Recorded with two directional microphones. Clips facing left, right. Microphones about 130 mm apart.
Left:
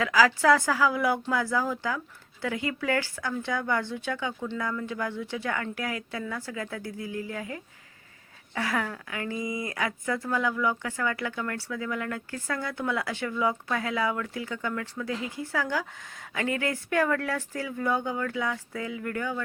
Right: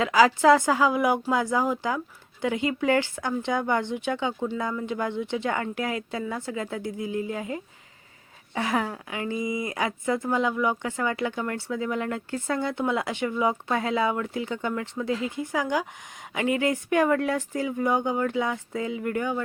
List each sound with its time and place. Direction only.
0.0 s speech: 25° right (ahead or behind)